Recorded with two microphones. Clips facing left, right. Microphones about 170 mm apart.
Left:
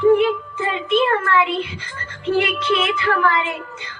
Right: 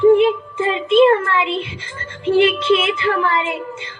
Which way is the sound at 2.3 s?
25° right (ahead or behind).